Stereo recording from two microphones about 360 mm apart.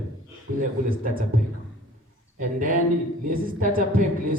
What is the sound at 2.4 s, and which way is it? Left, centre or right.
A woman's voice, right.